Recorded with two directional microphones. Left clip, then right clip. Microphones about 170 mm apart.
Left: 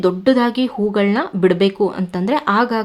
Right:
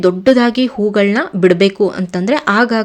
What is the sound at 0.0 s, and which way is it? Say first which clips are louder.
Speech: right 4 dB; 15° right (ahead or behind).